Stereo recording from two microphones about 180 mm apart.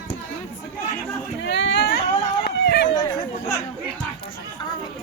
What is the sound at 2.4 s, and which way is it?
Run, 65° left (ahead or behind).